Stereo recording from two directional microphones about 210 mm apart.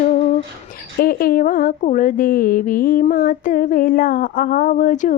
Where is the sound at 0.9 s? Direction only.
45° left (ahead or behind).